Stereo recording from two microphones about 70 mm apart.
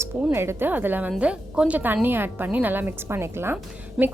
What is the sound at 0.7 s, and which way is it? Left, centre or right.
A woman's voice, right.